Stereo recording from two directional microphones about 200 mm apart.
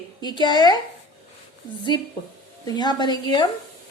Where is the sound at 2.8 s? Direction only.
20° left (ahead or behind).